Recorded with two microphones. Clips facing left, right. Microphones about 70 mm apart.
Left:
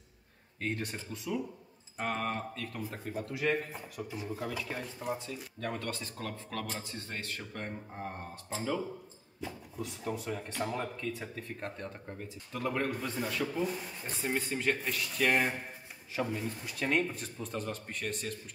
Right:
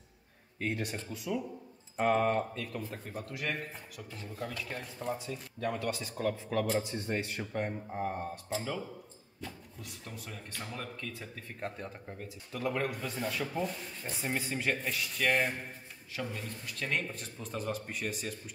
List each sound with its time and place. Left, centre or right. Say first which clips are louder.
0.6 s speech: right 1 dB; centre
5.2 s speech: right 3 dB; centre
11.4 s speech: even; centre
16.2 s speech: left 5 dB; centre
17.1 s speech: left 2 dB; centre